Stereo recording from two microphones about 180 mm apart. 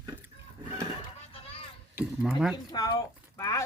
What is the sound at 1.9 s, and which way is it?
Speech, 5° right (ahead or behind).